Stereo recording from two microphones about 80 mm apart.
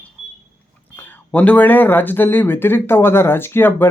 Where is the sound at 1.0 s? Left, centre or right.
Centre.